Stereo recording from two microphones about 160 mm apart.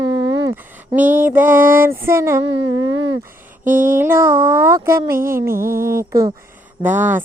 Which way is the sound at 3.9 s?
15° right (ahead or behind).